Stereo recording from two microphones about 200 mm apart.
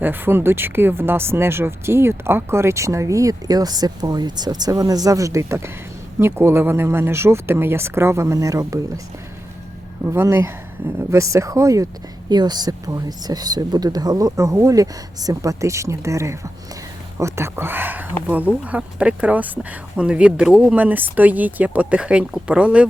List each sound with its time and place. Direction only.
0.0 s speech: 10° right (ahead or behind)
10.0 s speech: 10° right (ahead or behind)